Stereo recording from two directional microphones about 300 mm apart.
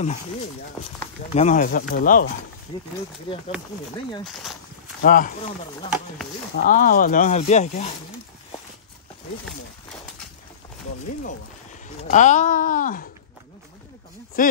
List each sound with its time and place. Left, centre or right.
1.3 s speech: left
4.2 s speech: centre
5.0 s speech: left
6.5 s speech: left
12.1 s speech: left
14.4 s speech: left